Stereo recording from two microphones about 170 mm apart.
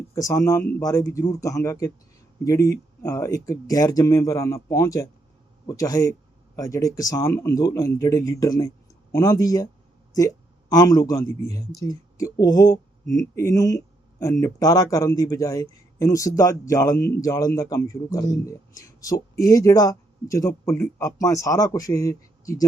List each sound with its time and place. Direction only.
0.1 s speech: 20° left (ahead or behind)